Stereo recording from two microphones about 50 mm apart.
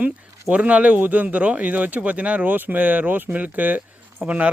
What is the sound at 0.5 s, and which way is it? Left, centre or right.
Speech, right.